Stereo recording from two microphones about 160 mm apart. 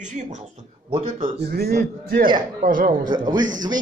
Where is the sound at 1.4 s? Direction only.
75° right (ahead or behind).